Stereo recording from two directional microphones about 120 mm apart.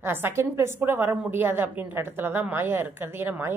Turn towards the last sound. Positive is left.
turn(degrees=-20)  # may be behind; listen again after turning